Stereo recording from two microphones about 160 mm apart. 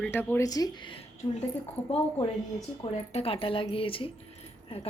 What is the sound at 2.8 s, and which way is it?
Speech, 35° left (ahead or behind).